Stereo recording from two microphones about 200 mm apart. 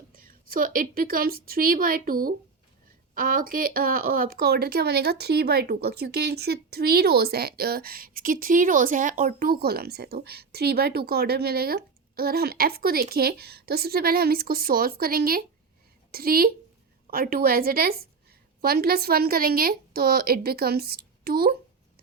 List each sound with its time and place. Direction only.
0.1 s a woman's voice: 45° right (ahead or behind)